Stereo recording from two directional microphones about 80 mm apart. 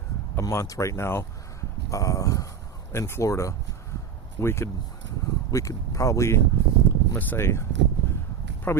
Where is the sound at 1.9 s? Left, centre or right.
Left.